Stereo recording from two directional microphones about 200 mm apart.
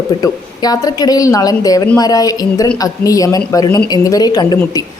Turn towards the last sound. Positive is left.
turn(degrees=20)  # may be behind; listen again after turning